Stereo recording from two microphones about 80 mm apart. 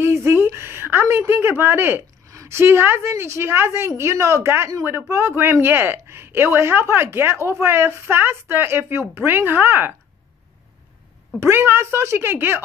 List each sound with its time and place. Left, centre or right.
0.0 s a sound: right
2.2 s a woman's voice: right
11.3 s a woman's voice: right